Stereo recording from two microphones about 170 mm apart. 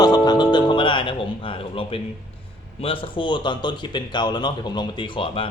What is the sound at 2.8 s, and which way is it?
Speech, 30° left (ahead or behind).